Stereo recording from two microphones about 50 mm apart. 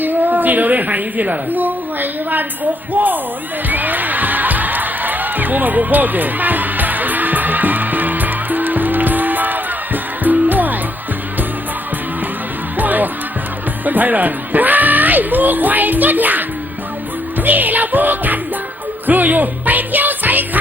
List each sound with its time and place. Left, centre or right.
0.0 s a woman's voice: right
3.7 s music: right
12.7 s music: right
13.8 s speech: right
17.4 s music: right